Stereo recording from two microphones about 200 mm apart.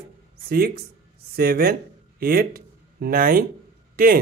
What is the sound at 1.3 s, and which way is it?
Speech, 50° right (ahead or behind).